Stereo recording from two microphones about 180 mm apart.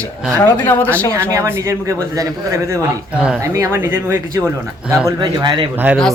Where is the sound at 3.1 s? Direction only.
5° right (ahead or behind).